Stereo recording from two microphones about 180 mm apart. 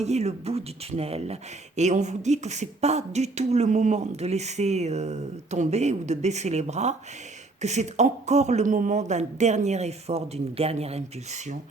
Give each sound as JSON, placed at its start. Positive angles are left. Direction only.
{"t": 0.0, "sound": "speech", "side_deg": -35}